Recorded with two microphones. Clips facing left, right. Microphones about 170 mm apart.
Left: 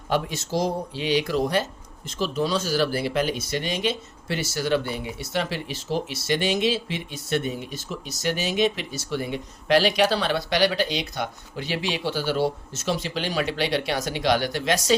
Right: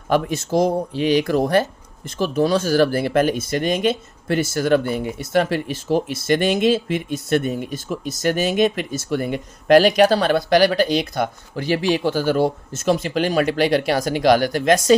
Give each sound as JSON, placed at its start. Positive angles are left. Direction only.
{"t": 0.1, "sound": "speech", "side_deg": -55}